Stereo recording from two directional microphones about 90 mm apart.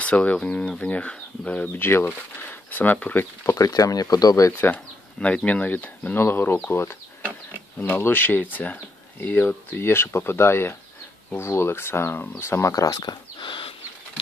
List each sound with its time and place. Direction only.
0.0 s speech: 15° left (ahead or behind)
3.5 s speech: 40° left (ahead or behind)
4.5 s speech: 25° left (ahead or behind)
5.2 s speech: 15° left (ahead or behind)
12.7 s speech: 45° left (ahead or behind); by 13.7 s 75° left (ahead or behind)